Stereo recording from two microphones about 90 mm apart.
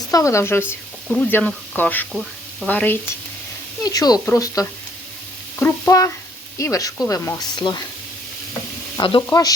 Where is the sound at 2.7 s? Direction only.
20° left (ahead or behind).